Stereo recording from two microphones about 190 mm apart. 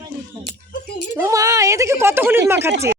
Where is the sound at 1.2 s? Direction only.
15° right (ahead or behind).